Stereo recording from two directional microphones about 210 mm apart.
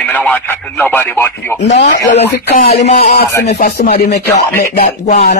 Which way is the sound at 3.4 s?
50° left (ahead or behind).